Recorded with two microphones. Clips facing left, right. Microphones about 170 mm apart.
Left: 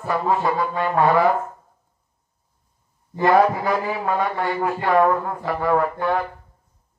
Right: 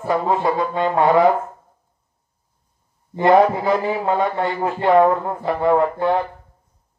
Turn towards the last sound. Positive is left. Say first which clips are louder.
# right 3 dB
turn(degrees=-20)  # may be behind; listen again after turning